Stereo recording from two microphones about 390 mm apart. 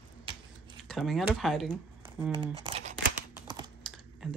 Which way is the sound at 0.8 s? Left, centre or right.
Centre.